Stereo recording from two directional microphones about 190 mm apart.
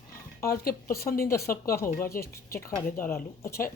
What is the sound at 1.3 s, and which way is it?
A woman's voice, 15° left (ahead or behind).